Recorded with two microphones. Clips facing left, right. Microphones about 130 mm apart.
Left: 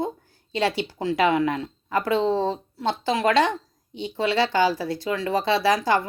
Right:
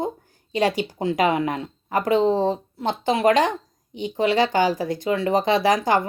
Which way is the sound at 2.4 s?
50° right (ahead or behind).